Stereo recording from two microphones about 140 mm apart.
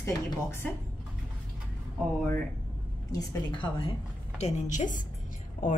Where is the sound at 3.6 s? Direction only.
40° left (ahead or behind).